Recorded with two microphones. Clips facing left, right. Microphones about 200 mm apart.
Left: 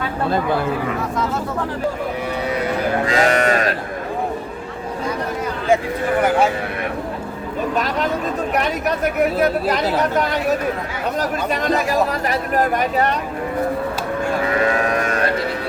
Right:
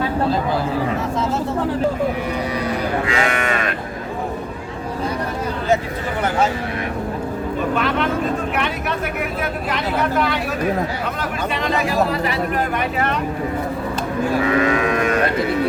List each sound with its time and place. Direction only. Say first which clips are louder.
3.1 s speech: left 4 dB; 40° left (ahead or behind)
7.8 s speech: even; 40° left (ahead or behind)
14.8 s livestock: right 1 dB; 35° left (ahead or behind)